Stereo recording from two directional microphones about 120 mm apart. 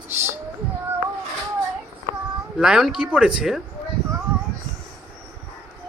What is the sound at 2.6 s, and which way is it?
Speech, 5° right (ahead or behind).